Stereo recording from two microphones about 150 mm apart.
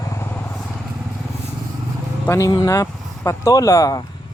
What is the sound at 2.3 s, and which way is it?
Speech, 25° left (ahead or behind).